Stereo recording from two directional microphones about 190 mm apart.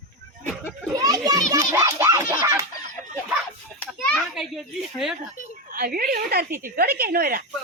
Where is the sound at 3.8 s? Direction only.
5° left (ahead or behind).